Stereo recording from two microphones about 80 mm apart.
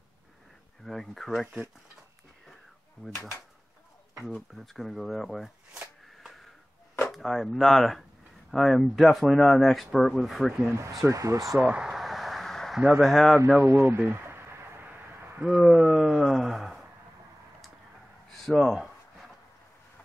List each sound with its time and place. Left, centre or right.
0.8 s speech: centre
3.1 s speech: left
4.3 s speech: centre
7.1 s speech: centre
11.1 s speech: right
11.6 s a sound: centre
13.0 s speech: centre
13.6 s speech: right
13.9 s a sound: right
15.4 s speech: centre
18.4 s speech: centre